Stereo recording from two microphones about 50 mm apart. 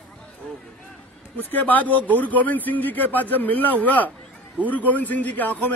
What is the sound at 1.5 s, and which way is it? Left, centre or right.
A man's voice, left.